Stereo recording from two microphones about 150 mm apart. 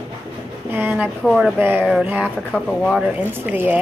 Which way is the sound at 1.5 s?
10° right (ahead or behind).